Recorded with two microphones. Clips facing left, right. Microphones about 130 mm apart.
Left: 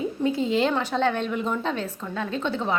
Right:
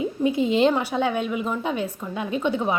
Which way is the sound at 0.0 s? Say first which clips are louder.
Right 2 dB; 15° right (ahead or behind).